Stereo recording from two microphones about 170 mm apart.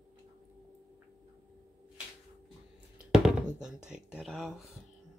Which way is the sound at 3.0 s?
5° right (ahead or behind).